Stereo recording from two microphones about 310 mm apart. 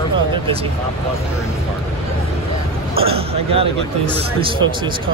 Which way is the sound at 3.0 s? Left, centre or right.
Centre.